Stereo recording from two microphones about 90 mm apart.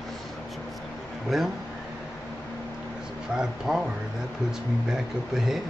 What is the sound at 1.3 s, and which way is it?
Speech, 5° right (ahead or behind).